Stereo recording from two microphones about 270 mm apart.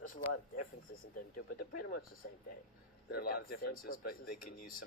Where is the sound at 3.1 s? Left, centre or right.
Left.